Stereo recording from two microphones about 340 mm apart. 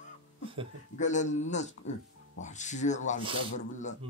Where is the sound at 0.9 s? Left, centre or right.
Left.